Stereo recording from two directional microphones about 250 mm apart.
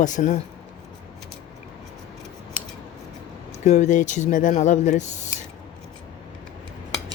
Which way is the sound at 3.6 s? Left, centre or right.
Left.